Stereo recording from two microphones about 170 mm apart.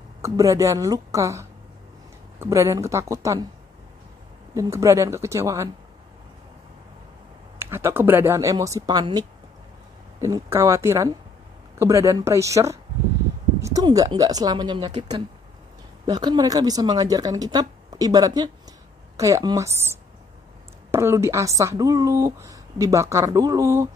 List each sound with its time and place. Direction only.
0.2 s speech: 20° right (ahead or behind)
4.6 s speech: 15° right (ahead or behind)
7.5 s speech: 15° right (ahead or behind)
10.2 s speech: 15° right (ahead or behind)
16.1 s speech: 25° right (ahead or behind)